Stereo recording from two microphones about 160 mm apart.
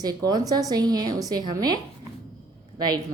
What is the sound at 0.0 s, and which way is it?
A woman's voice, 25° right (ahead or behind).